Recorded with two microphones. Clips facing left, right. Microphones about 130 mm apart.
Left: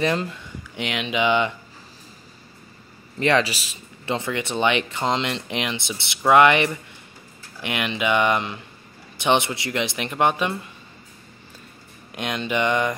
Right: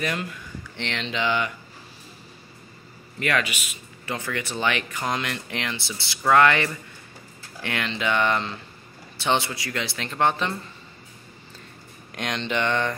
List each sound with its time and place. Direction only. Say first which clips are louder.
0.0 s speech: left 6 dB; 30° left (ahead or behind)
0.7 s speech: left 4 dB; 10° left (ahead or behind)
3.2 s speech: left 5 dB; 30° left (ahead or behind); by 10.5 s 15° left (ahead or behind)
12.1 s speech: left 2 dB; 5° left (ahead or behind)